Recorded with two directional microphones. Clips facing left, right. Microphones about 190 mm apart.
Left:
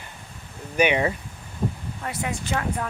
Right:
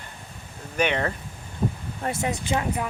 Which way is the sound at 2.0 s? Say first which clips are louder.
Right 3 dB; 35° right (ahead or behind).